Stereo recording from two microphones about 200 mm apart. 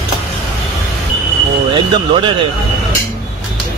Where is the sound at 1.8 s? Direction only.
25° right (ahead or behind).